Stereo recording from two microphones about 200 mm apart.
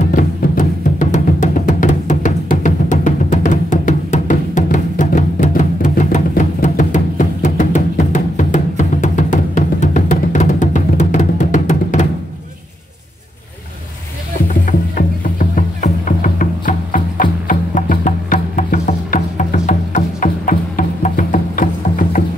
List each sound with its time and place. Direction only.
0.1 s music: 40° left (ahead or behind)
14.5 s music: 45° left (ahead or behind)